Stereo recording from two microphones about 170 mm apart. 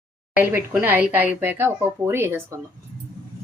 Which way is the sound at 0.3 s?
10° right (ahead or behind).